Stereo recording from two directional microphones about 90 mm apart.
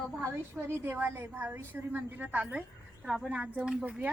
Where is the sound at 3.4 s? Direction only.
20° right (ahead or behind).